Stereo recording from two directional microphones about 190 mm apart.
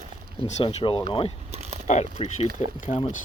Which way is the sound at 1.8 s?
35° left (ahead or behind).